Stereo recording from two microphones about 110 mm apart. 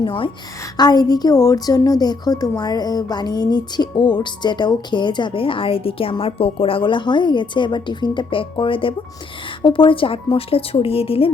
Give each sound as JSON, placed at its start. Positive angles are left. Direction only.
{"t": 0.0, "sound": "a woman's voice", "side_deg": 50}
{"t": 0.8, "sound": "a woman's voice", "side_deg": 35}